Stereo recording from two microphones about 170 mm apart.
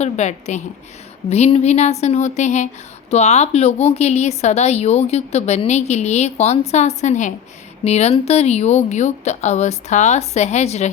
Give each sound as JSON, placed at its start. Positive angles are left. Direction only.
{"t": 0.0, "sound": "a woman's voice", "side_deg": 40}